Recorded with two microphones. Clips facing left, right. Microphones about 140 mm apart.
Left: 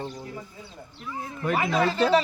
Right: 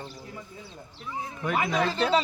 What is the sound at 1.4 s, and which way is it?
Speech, 5° left (ahead or behind).